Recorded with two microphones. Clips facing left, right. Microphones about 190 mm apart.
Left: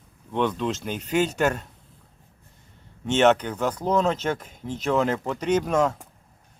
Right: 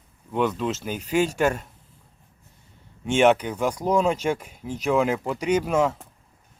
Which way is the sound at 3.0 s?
10° right (ahead or behind).